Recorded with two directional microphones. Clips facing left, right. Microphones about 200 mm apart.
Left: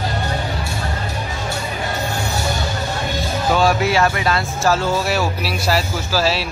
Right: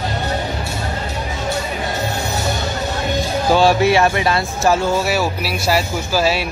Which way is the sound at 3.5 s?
25° right (ahead or behind).